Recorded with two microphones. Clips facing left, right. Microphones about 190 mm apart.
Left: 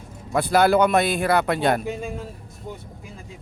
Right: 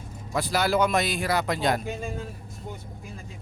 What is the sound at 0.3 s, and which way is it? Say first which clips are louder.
Speech: left 6 dB; 55° left (ahead or behind).